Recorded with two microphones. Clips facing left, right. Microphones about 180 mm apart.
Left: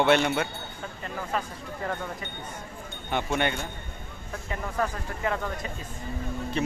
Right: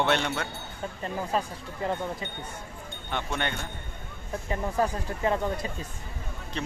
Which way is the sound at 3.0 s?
10° left (ahead or behind).